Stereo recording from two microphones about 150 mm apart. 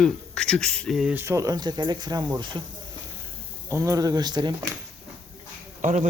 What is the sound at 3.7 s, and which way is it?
Speech, 20° right (ahead or behind).